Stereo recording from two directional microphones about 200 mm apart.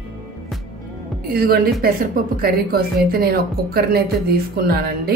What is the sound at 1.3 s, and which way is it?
A woman's voice, 50° right (ahead or behind).